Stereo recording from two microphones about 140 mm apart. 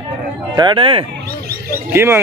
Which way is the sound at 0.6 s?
35° right (ahead or behind).